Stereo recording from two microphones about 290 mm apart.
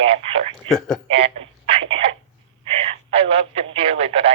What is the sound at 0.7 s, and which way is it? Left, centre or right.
Speech, centre.